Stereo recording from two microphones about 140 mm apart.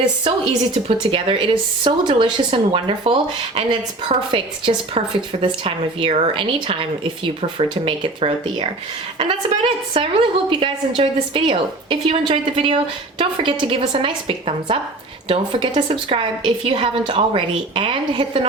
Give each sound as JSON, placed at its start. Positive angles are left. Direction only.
{"t": 0.0, "sound": "speech", "side_deg": -35}
{"t": 7.9, "sound": "speech", "side_deg": -40}
{"t": 9.9, "sound": "speech", "side_deg": -40}